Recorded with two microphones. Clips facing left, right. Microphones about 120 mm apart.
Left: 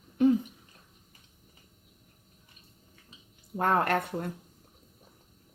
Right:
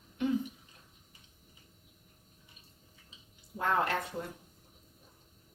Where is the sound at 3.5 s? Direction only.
55° left (ahead or behind).